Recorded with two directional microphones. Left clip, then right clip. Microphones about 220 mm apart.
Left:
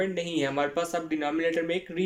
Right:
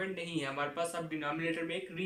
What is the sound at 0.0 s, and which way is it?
Speech, 35° left (ahead or behind).